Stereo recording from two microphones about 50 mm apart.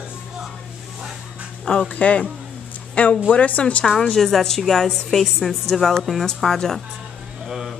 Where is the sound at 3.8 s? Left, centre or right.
Centre.